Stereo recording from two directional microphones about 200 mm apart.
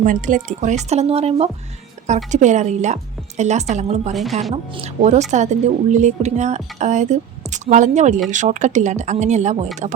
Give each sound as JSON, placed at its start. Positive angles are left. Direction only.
{"t": 0.0, "sound": "speech", "side_deg": -40}
{"t": 4.1, "sound": "speech", "side_deg": 0}
{"t": 4.5, "sound": "speech", "side_deg": -35}